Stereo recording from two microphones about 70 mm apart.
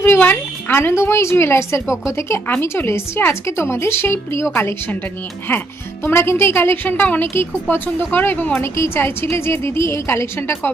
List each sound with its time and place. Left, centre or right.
0.0 s speech: left